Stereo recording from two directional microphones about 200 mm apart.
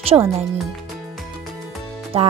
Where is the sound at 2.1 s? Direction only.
30° right (ahead or behind).